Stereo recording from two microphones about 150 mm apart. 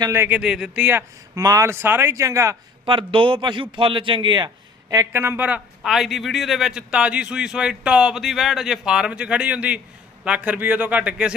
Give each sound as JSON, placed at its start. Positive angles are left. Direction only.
{"t": 0.0, "sound": "a man's voice", "side_deg": -15}
{"t": 1.4, "sound": "speech", "side_deg": -20}
{"t": 2.8, "sound": "a man's voice", "side_deg": -35}